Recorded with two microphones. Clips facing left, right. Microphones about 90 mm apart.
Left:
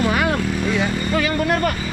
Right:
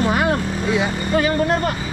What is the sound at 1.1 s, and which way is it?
Speech, 30° right (ahead or behind).